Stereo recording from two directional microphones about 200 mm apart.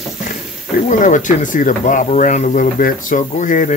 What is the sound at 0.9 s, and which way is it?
Speech, 40° left (ahead or behind).